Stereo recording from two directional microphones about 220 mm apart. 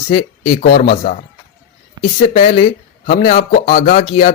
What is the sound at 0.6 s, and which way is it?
Speech, 45° left (ahead or behind).